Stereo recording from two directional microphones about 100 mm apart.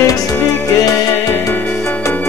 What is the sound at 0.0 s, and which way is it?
Music, 35° left (ahead or behind).